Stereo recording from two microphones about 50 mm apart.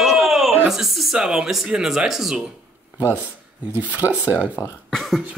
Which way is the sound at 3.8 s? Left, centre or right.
Right.